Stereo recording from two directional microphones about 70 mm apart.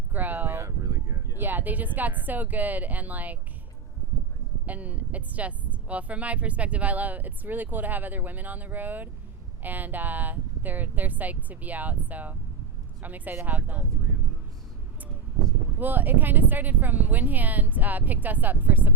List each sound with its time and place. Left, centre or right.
0.1 s a sound: right
1.4 s speech: right
4.6 s speech: right
15.8 s speech: right